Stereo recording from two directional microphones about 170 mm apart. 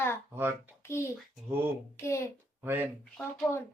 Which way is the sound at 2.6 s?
10° right (ahead or behind).